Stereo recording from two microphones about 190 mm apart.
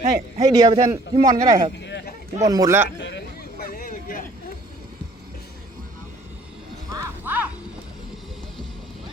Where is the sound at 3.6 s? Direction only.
50° left (ahead or behind).